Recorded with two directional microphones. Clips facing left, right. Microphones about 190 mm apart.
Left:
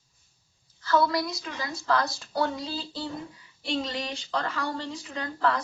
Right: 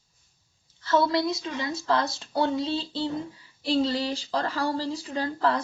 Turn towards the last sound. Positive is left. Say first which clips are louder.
# right 2 dB
turn(degrees=-30)  # may be behind; listen again after turning